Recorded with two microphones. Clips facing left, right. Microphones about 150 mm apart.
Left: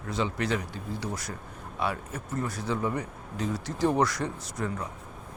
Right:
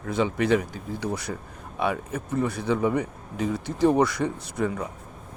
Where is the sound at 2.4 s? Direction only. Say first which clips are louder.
Right 6 dB; 60° right (ahead or behind).